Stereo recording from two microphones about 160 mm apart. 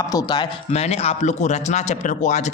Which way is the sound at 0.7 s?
40° left (ahead or behind).